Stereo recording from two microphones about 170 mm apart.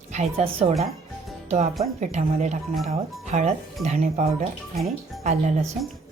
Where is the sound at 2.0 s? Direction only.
45° right (ahead or behind).